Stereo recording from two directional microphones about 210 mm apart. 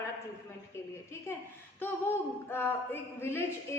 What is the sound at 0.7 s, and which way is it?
A woman's voice, 10° left (ahead or behind).